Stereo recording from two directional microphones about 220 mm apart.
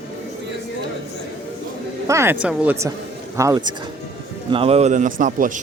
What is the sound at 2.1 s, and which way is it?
A man's voice, 15° right (ahead or behind).